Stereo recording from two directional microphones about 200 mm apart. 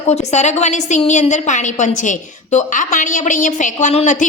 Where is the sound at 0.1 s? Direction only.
35° left (ahead or behind).